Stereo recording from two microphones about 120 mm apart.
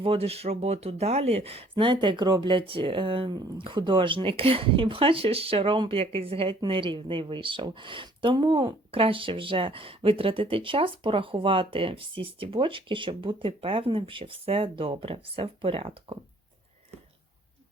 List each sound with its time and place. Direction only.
0.0 s speech: 55° right (ahead or behind)
1.7 s speech: 45° right (ahead or behind)